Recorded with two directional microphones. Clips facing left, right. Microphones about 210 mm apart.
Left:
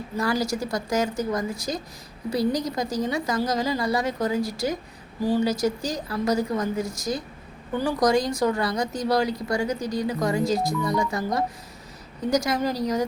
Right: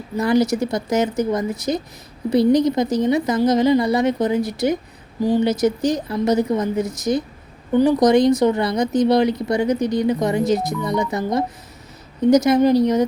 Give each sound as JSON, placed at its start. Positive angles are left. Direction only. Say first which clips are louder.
{"t": 0.2, "sound": "speech", "louder": "right 8 dB", "side_deg": -20}